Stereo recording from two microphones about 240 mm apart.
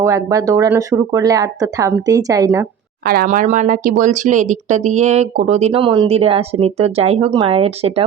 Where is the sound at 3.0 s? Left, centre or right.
Right.